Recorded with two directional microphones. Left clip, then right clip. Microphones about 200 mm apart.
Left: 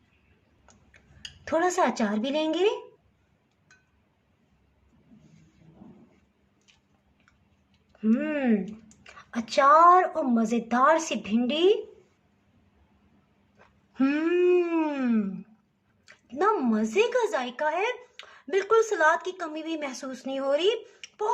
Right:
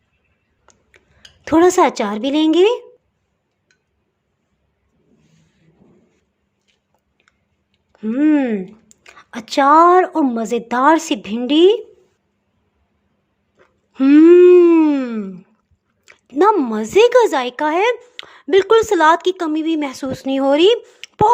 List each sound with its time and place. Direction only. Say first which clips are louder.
0.6 s tick-tock: right 7 dB; 45° right (ahead or behind)
1.5 s speech: right 12 dB; 50° right (ahead or behind)
7.9 s speech: right 12 dB; 40° right (ahead or behind)
13.9 s speech: right 17 dB; 40° right (ahead or behind)